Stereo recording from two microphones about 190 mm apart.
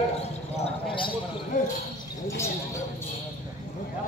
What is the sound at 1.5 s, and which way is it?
Basketball bounce, 40° left (ahead or behind).